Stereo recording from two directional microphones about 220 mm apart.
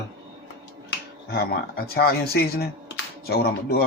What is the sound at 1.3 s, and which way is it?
Speech, 45° left (ahead or behind).